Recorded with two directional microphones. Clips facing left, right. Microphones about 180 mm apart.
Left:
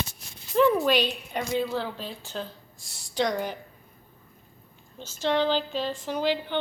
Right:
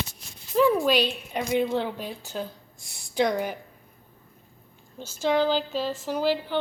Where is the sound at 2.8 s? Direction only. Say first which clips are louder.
Right 1 dB; 60° right (ahead or behind).